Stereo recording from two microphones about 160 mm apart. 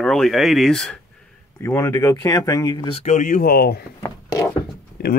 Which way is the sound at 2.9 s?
45° left (ahead or behind).